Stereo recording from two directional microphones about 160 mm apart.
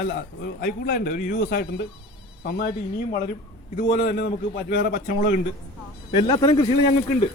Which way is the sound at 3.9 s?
90° left.